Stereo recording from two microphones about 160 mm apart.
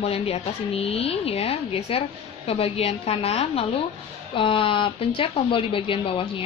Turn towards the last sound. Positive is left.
turn(degrees=35)  # may be behind; listen again after turning